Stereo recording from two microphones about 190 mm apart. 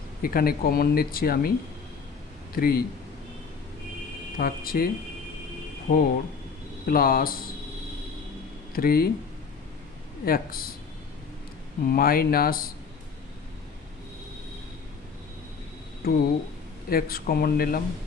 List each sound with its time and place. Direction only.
0.2 s speech: 50° left (ahead or behind)
2.5 s speech: 50° left (ahead or behind)
4.4 s speech: 50° left (ahead or behind)
8.7 s speech: 50° left (ahead or behind)
10.2 s speech: 50° left (ahead or behind)
11.8 s speech: 50° left (ahead or behind)
16.0 s speech: 50° left (ahead or behind)